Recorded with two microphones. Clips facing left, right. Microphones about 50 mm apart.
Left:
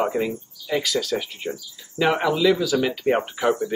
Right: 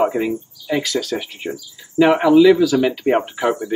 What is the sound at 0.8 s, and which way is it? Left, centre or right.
Speech, centre.